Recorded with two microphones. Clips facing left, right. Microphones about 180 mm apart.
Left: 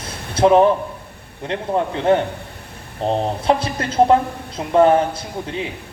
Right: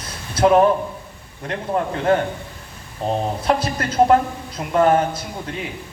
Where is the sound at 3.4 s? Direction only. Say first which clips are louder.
Left 1 dB; 30° left (ahead or behind).